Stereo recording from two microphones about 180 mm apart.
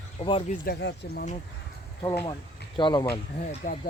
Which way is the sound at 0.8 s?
70° left (ahead or behind).